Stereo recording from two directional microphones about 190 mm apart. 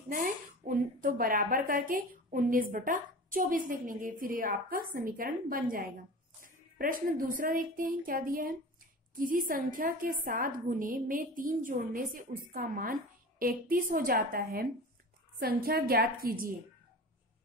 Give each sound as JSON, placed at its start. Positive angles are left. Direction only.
{"t": 0.1, "sound": "a woman's voice", "side_deg": -45}